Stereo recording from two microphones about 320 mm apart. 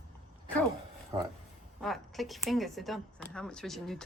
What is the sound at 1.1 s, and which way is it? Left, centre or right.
Speech, centre.